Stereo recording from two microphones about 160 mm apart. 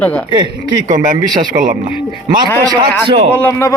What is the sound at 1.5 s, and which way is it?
Speech, 55° right (ahead or behind).